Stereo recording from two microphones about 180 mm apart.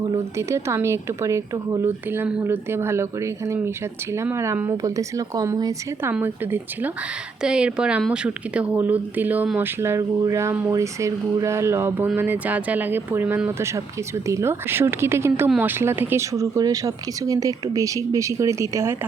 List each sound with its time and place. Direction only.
0.1 s speech: 15° right (ahead or behind)